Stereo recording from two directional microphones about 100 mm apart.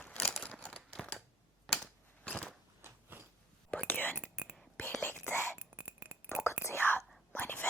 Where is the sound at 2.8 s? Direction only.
25° right (ahead or behind).